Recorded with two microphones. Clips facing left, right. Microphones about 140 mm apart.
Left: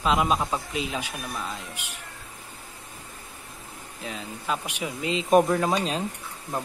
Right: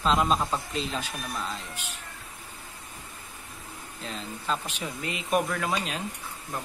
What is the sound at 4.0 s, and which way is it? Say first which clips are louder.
A man's voice: left 2 dB; 10° left (ahead or behind).